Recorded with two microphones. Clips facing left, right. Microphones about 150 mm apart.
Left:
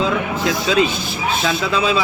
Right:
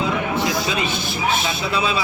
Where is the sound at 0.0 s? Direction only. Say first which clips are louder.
Left 2 dB; 90° left.